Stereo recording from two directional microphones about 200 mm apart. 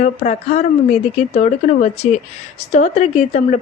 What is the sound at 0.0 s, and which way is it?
A woman's voice, 35° left (ahead or behind).